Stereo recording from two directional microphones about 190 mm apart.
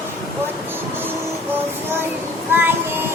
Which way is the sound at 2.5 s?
10° right (ahead or behind).